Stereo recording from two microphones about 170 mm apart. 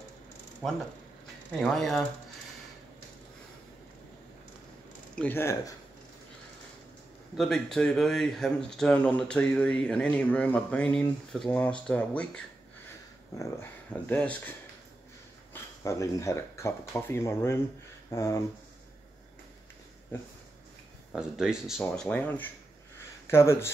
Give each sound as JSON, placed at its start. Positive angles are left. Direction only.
{"t": 0.6, "sound": "speech", "side_deg": 5}
{"t": 5.1, "sound": "speech", "side_deg": 10}
{"t": 7.3, "sound": "speech", "side_deg": 0}
{"t": 15.5, "sound": "speech", "side_deg": 20}
{"t": 21.1, "sound": "speech", "side_deg": -5}